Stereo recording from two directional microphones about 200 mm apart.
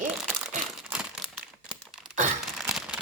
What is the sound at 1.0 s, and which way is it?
Crumpling, centre (ahead or behind).